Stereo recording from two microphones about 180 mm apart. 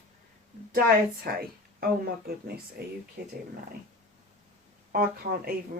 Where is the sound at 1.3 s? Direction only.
60° right (ahead or behind).